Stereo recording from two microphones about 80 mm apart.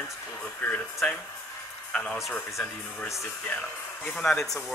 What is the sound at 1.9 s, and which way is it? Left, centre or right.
Speech, centre.